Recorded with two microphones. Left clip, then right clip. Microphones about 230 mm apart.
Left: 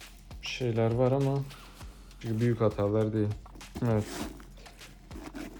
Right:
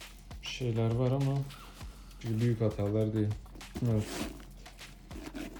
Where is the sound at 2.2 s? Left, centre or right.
Centre.